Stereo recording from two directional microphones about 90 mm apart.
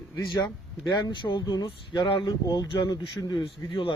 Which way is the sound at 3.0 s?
65° left (ahead or behind).